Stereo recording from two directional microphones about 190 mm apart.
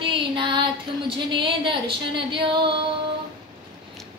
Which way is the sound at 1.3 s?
25° right (ahead or behind).